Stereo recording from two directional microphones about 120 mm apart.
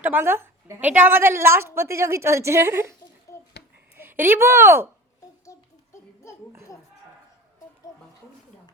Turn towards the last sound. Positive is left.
turn(degrees=30)  # may be behind; listen again after turning